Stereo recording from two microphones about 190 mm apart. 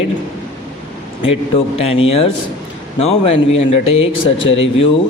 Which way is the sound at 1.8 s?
30° left (ahead or behind).